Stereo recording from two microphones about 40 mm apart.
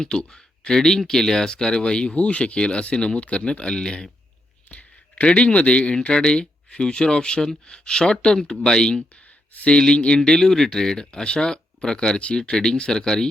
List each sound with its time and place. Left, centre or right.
0.0 s speech: centre
4.7 s speech: left; by 13.2 s centre